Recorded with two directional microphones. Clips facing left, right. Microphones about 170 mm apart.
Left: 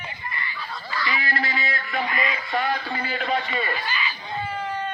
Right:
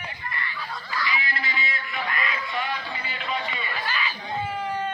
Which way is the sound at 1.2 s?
40° left (ahead or behind).